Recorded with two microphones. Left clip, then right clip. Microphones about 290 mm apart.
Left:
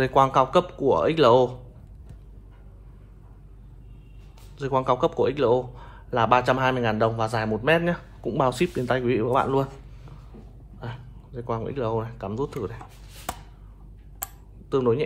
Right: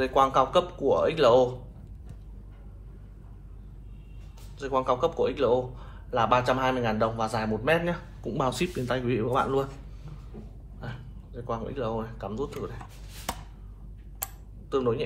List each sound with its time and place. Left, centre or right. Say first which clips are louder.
0.0 s a man's voice: left 3 dB; left
4.6 s a man's voice: left 3 dB; left
10.8 s speech: left 3 dB; left
14.7 s a man's voice: left 4 dB; left